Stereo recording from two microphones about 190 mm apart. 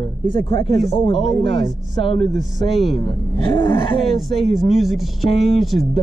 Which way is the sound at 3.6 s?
25° left (ahead or behind).